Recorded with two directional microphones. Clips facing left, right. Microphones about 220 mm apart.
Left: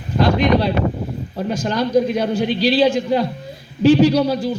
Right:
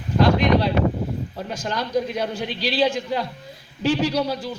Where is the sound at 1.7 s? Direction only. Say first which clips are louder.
Left 7 dB; 35° left (ahead or behind).